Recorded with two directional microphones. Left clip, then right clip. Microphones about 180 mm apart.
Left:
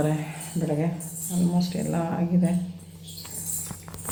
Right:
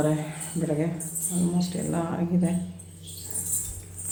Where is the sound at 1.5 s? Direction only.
10° left (ahead or behind).